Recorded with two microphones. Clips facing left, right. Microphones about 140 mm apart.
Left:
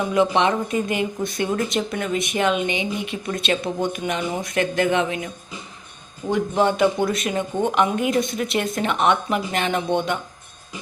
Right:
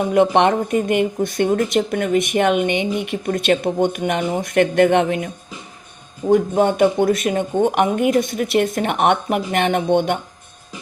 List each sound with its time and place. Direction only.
0.0 s speech: 55° right (ahead or behind)
6.3 s speech: 50° right (ahead or behind)
7.6 s speech: 60° right (ahead or behind)